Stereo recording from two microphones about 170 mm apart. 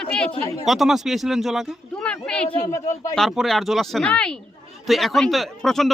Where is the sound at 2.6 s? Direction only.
20° left (ahead or behind).